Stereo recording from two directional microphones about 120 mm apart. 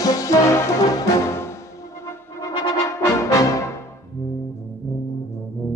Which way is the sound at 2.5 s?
35° left (ahead or behind).